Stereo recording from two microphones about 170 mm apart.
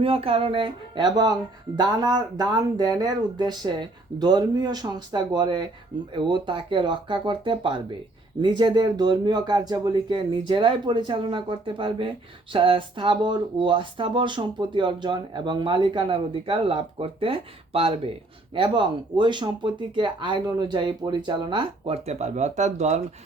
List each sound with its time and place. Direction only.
0.0 s speech: 35° right (ahead or behind)